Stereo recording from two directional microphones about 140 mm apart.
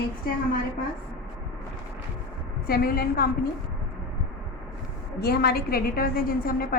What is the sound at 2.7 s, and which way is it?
Speech, 90° left.